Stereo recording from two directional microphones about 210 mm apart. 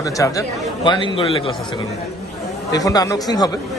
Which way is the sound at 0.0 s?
15° left (ahead or behind).